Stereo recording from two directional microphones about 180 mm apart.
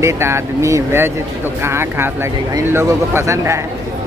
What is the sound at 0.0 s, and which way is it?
Speech, 15° right (ahead or behind).